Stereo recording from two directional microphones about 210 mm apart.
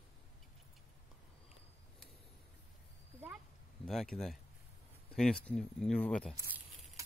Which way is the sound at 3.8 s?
Centre (ahead or behind).